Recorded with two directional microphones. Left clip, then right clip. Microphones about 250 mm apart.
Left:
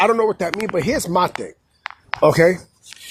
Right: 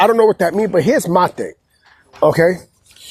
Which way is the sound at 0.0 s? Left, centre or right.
Right.